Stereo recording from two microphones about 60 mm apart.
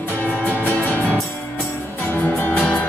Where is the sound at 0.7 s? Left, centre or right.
Left.